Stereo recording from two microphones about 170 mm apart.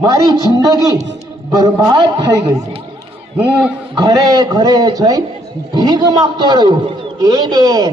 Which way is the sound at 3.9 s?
25° right (ahead or behind).